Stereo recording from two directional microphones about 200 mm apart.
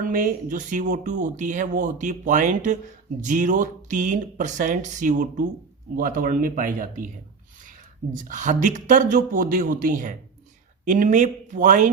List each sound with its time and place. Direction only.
0.0 s speech: 40° right (ahead or behind)